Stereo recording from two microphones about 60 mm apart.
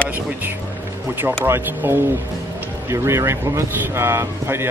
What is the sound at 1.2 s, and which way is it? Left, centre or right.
Speech, right.